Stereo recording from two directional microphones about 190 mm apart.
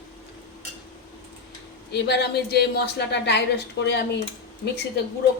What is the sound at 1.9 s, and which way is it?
A woman's voice, 60° left (ahead or behind).